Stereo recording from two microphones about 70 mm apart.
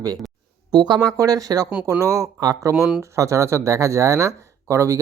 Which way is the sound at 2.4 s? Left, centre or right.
Right.